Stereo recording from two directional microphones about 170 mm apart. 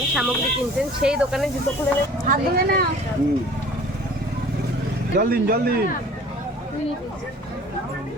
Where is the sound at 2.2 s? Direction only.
60° right (ahead or behind).